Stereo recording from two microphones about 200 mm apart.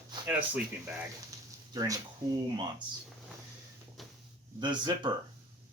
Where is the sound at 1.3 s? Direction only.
15° right (ahead or behind).